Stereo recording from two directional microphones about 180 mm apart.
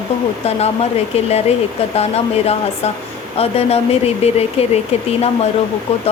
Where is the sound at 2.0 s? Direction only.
35° left (ahead or behind).